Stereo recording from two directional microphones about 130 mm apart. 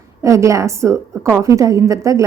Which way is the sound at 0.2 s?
25° right (ahead or behind).